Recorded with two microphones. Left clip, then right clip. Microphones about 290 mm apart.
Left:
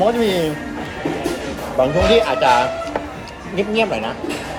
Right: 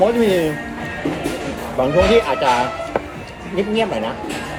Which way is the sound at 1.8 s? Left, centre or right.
Centre.